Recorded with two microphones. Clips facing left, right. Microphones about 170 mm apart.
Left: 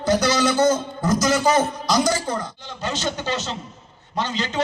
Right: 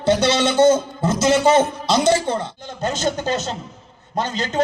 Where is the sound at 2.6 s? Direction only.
50° right (ahead or behind).